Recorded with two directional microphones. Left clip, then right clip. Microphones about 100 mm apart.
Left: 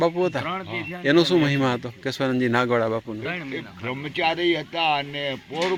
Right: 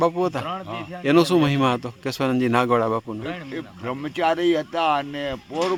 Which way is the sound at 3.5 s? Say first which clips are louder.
Right 1 dB; 40° right (ahead or behind).